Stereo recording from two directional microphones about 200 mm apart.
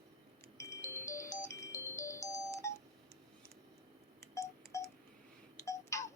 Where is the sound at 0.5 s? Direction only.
15° left (ahead or behind).